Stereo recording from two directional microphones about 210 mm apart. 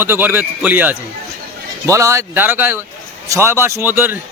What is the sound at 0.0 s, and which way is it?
A man's voice, 10° right (ahead or behind).